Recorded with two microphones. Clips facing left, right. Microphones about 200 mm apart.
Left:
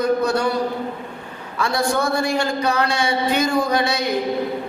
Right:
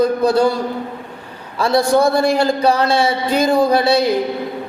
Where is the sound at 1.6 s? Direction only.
35° right (ahead or behind).